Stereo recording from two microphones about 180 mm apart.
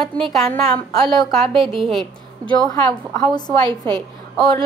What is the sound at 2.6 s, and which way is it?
Speech, 20° left (ahead or behind).